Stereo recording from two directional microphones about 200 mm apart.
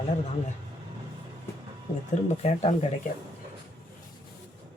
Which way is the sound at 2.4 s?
30° left (ahead or behind).